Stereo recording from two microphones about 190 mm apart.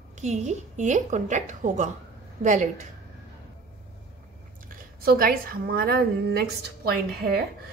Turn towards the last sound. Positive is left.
turn(degrees=-55)  # may be behind; listen again after turning